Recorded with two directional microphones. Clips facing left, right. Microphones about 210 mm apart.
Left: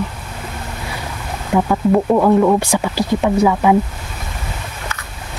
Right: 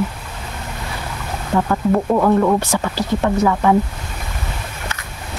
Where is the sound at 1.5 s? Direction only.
10° left (ahead or behind).